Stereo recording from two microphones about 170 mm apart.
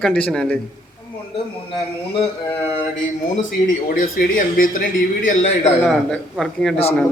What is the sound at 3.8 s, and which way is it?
Speech, 60° left (ahead or behind).